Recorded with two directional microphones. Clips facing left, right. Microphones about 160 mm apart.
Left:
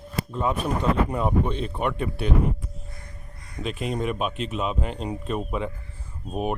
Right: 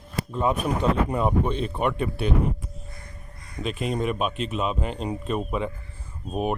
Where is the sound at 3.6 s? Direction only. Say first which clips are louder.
Right 1 dB; 25° right (ahead or behind).